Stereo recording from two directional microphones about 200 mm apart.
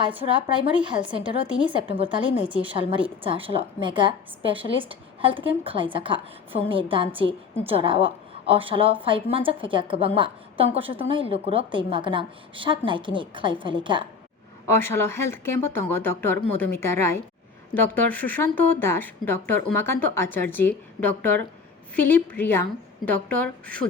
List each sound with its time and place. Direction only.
0.6 s a woman's voice: 25° right (ahead or behind)
2.4 s a woman's voice: 5° right (ahead or behind)
3.2 s a woman's voice: 25° right (ahead or behind)
14.7 s speech: 10° left (ahead or behind)